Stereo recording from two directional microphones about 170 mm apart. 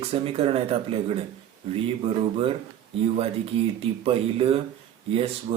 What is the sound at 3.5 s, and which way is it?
Speech, 35° right (ahead or behind).